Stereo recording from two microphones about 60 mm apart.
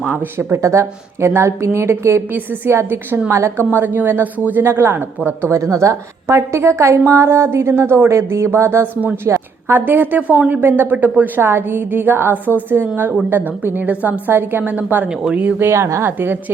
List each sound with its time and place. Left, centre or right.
0.3 s a woman's voice: right
2.6 s a woman's voice: right
3.7 s a woman's voice: right
4.6 s a woman's voice: right
5.5 s a woman's voice: right
10.6 s a woman's voice: right
13.3 s a woman's voice: right
15.6 s a woman's voice: right
16.0 s a woman's voice: right